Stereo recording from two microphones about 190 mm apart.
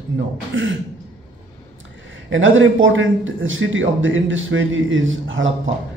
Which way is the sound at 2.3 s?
85° right.